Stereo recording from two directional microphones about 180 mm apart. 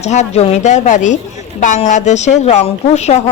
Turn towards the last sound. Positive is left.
turn(degrees=40)  # may be behind; listen again after turning